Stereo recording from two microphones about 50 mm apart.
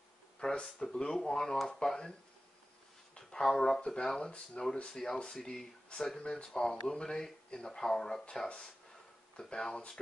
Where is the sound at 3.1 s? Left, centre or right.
Centre.